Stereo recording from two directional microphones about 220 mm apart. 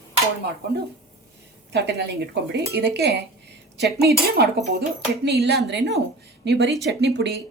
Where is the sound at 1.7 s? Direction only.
50° right (ahead or behind).